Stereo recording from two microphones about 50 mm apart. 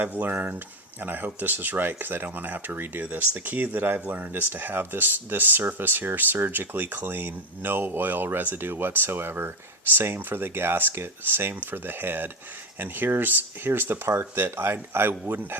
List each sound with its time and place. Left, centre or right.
0.0 s speech: right